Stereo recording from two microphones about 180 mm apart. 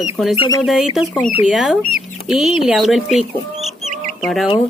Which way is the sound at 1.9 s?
5° right (ahead or behind).